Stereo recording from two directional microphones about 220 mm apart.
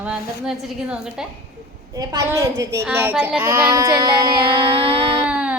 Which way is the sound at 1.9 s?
15° right (ahead or behind).